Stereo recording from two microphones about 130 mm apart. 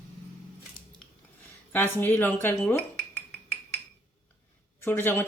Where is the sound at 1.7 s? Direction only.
15° left (ahead or behind).